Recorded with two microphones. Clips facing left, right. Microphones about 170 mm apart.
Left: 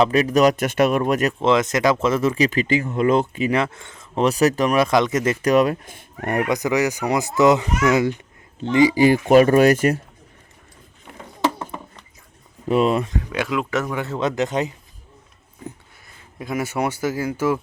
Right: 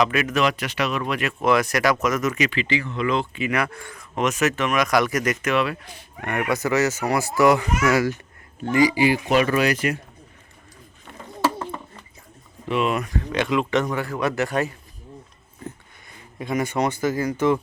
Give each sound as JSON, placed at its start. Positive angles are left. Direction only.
{"t": 0.0, "sound": "speech", "side_deg": 35}
{"t": 1.3, "sound": "speech", "side_deg": 20}
{"t": 2.5, "sound": "speech", "side_deg": 45}
{"t": 3.5, "sound": "speech", "side_deg": 25}
{"t": 6.5, "sound": "a child's voice", "side_deg": 15}
{"t": 9.0, "sound": "speech", "side_deg": 50}
{"t": 11.6, "sound": "a sound", "side_deg": 15}
{"t": 12.6, "sound": "speech", "side_deg": 40}
{"t": 13.1, "sound": "speech", "side_deg": 5}
{"t": 13.9, "sound": "speech", "side_deg": 20}
{"t": 16.4, "sound": "a child's voice", "side_deg": 5}